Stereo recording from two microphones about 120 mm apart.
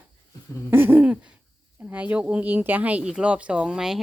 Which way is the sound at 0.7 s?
20° right (ahead or behind).